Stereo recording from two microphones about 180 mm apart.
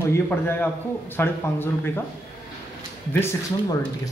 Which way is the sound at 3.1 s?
10° left (ahead or behind).